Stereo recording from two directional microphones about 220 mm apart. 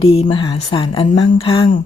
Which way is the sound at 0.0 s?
25° left (ahead or behind).